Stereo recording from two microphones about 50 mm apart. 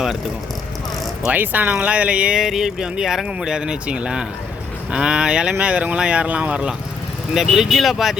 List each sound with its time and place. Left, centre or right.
1.3 s speech: right
2.4 s speech: centre
7.3 s speech: centre